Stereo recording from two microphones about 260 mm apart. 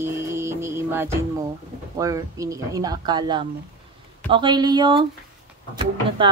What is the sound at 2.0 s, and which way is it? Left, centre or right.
Speech, centre.